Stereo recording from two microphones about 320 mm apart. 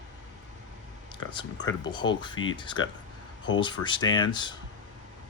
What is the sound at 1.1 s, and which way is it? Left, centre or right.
Speech, centre.